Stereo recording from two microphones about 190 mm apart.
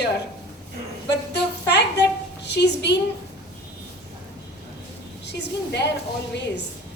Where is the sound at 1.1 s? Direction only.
60° left (ahead or behind).